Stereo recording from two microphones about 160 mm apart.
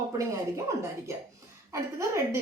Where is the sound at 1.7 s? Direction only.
20° right (ahead or behind).